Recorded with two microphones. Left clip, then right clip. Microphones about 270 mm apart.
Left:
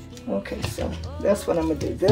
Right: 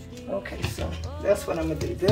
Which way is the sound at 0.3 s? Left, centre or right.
Left.